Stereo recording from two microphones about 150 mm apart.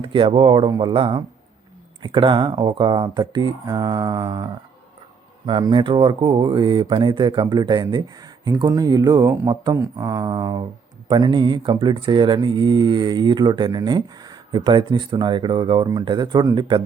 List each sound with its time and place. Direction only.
0.0 s speech: 35° right (ahead or behind)
5.5 s speech: 30° right (ahead or behind)